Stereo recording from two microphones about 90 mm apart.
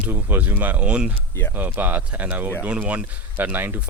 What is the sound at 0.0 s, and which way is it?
Speech, 20° right (ahead or behind).